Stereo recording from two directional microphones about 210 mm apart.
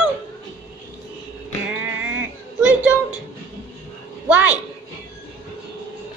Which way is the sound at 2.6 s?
5° right (ahead or behind).